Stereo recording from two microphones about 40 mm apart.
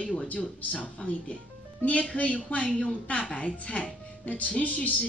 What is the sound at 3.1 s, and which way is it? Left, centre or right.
Speech, left.